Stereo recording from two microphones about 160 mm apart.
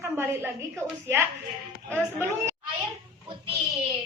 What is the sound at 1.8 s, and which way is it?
Speech, 15° right (ahead or behind).